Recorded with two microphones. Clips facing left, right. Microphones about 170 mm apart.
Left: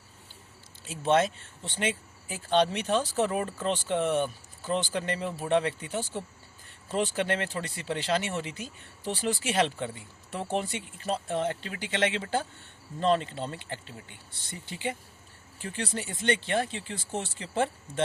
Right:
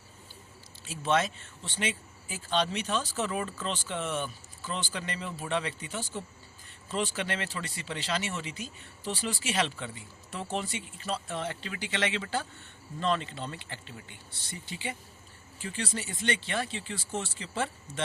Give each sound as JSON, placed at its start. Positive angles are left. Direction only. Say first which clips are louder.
{"t": 0.9, "sound": "speech", "louder": "left 4 dB", "side_deg": 55}